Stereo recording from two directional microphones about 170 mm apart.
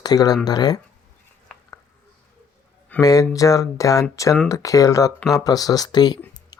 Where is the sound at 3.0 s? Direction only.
20° left (ahead or behind).